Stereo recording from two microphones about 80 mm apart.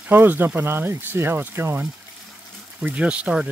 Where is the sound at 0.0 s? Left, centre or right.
Right.